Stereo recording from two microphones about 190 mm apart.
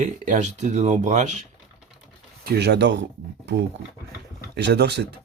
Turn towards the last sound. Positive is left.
turn(degrees=-60)  # may be behind; listen again after turning